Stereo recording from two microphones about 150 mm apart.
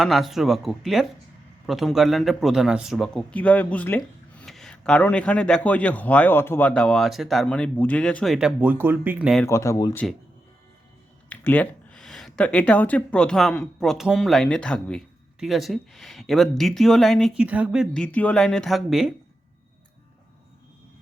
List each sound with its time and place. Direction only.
0.0 s speech: centre (ahead or behind)
9.5 s speech: 20° left (ahead or behind)
11.3 s speech: 10° left (ahead or behind); by 18.0 s 5° right (ahead or behind)
18.0 s speech: 10° left (ahead or behind)